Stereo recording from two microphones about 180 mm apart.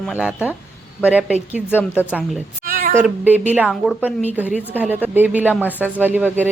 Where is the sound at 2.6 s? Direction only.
50° right (ahead or behind).